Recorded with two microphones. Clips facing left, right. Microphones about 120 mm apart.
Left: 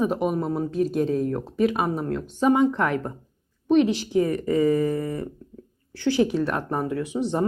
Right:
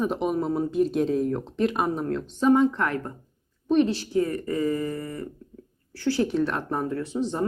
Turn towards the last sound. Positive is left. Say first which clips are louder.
# left 2 dB
turn(degrees=15)  # may be behind; listen again after turning